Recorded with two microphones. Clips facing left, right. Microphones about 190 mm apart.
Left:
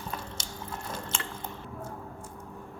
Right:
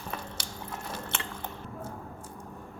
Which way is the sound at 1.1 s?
65° right (ahead or behind).